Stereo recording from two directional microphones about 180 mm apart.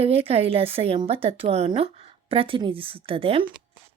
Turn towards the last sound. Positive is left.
turn(degrees=-30)  # may be behind; listen again after turning